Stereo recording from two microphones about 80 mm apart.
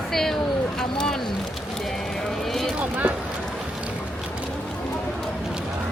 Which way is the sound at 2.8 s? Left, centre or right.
Centre.